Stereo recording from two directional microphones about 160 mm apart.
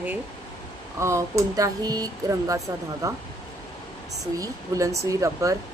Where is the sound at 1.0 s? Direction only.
15° right (ahead or behind).